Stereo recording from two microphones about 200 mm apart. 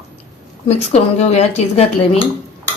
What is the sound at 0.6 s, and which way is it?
Speech, 30° left (ahead or behind).